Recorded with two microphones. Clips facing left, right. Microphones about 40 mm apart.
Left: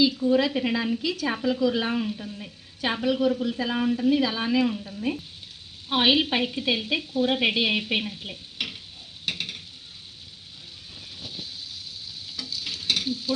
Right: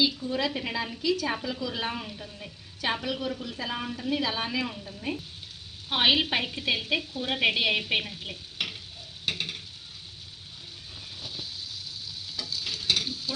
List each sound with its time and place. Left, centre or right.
0.2 s a woman's voice: left
4.3 s a woman's voice: centre
8.2 s stir: centre
9.2 s a sound: centre
11.2 s vehicle: centre
12.6 s stir: centre